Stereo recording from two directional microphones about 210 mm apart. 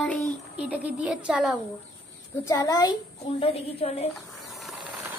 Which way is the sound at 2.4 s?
15° left (ahead or behind).